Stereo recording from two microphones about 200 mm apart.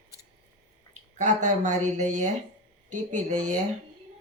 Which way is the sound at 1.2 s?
35° right (ahead or behind).